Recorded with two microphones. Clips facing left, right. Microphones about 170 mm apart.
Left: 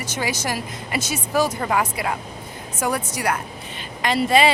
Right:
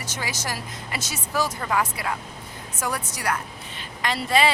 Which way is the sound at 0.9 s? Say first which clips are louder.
Left 6 dB; 55° left (ahead or behind).